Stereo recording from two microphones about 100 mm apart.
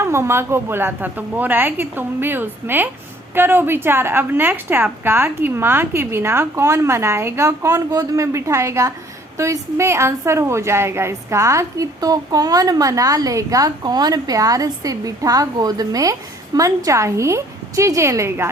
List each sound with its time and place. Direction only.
0.0 s a woman's voice: 25° right (ahead or behind)